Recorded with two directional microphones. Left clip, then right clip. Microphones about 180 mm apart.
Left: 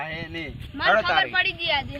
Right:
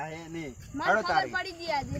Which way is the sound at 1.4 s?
10° right (ahead or behind).